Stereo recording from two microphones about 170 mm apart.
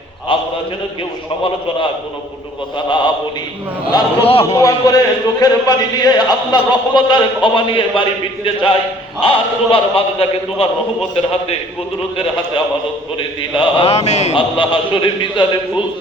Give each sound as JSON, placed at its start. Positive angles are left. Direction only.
{"t": 0.3, "sound": "a sound", "side_deg": 30}
{"t": 2.7, "sound": "a man's voice", "side_deg": 30}
{"t": 4.4, "sound": "a man's voice", "side_deg": 20}